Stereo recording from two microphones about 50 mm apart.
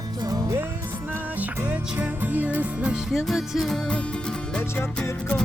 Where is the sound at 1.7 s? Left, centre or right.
Right.